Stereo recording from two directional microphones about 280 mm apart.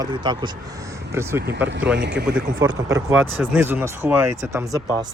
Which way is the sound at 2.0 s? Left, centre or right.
Right.